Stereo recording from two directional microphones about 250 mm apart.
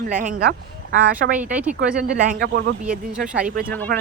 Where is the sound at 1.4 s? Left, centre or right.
Centre.